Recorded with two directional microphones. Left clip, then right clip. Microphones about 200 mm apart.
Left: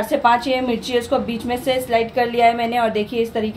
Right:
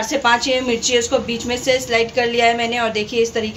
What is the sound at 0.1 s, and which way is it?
A woman's voice, 40° left (ahead or behind).